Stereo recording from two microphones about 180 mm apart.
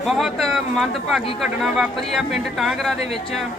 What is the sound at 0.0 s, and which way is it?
Speech, centre (ahead or behind).